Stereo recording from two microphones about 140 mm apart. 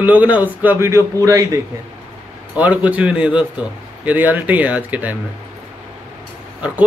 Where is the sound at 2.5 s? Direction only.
10° right (ahead or behind).